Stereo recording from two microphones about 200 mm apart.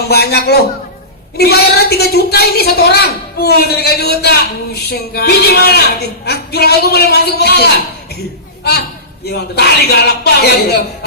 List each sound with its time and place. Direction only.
0.1 s a man's voice: 55° left (ahead or behind)
9.2 s a man's voice: 55° left (ahead or behind)